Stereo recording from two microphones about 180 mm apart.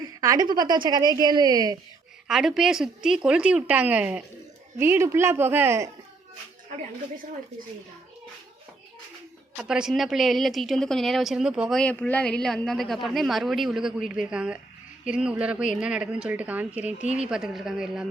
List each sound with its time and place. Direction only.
0.0 s a woman's voice: 20° right (ahead or behind)
2.2 s a woman's voice: 5° right (ahead or behind)
9.6 s a woman's voice: 5° right (ahead or behind)